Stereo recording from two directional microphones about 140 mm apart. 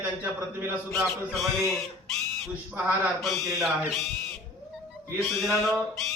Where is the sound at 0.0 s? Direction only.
15° right (ahead or behind).